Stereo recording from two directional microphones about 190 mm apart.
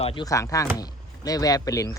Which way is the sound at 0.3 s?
15° left (ahead or behind).